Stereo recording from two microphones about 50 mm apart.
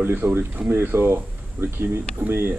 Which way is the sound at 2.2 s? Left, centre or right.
Right.